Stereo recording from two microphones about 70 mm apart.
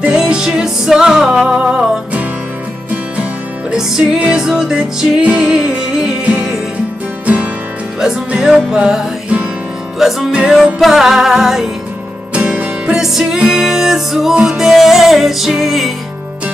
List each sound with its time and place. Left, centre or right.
0.0 s music: centre
3.7 s music: centre
8.0 s music: centre
9.9 s music: centre
12.4 s music: centre
14.6 s music: centre